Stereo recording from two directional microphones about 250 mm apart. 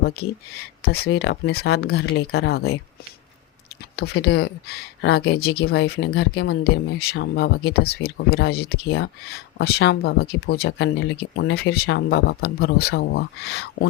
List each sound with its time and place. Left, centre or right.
0.8 s speech: left
3.9 s speech: left